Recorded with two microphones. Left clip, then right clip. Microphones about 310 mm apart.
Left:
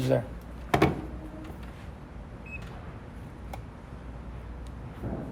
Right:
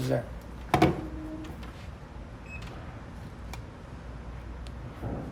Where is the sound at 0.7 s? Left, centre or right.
Centre.